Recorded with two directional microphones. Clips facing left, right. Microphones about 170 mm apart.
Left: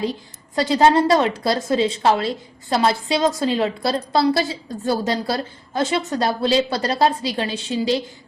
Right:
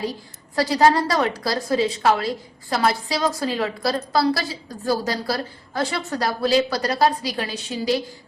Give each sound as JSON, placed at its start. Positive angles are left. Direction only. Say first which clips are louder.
{"t": 0.5, "sound": "a woman's voice", "louder": "left 2 dB", "side_deg": 20}